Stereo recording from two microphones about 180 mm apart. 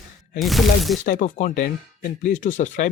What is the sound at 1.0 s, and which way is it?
Speech, 45° left (ahead or behind).